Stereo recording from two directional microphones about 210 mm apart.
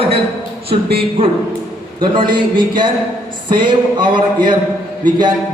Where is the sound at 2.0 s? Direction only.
25° right (ahead or behind).